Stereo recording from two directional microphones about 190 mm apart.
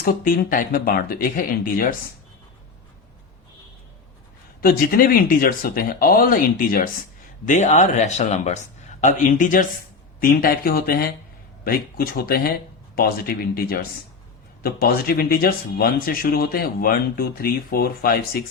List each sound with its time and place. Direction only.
0.0 s speech: 50° left (ahead or behind)
4.6 s speech: 50° left (ahead or behind)